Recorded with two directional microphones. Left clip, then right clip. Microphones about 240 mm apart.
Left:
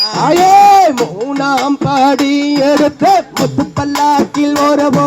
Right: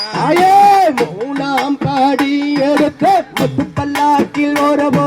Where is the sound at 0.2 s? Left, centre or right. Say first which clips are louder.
Left 2 dB; left.